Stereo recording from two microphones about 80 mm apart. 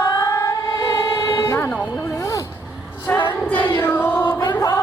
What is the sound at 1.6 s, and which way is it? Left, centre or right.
Music, centre.